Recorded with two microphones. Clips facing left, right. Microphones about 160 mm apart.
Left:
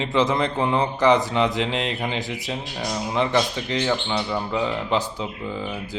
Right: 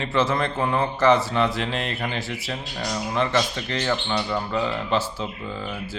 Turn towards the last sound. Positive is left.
turn(degrees=15)  # may be behind; listen again after turning